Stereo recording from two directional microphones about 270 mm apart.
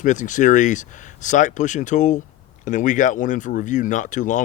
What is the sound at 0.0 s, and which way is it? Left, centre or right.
Speech, left.